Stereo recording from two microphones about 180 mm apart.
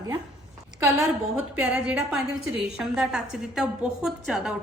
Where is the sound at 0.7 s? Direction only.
20° right (ahead or behind).